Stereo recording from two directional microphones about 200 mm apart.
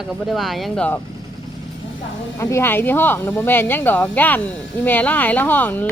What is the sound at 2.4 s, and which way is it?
Speech, 15° left (ahead or behind).